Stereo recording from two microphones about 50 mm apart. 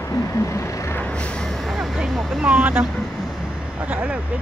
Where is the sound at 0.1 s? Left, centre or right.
Left.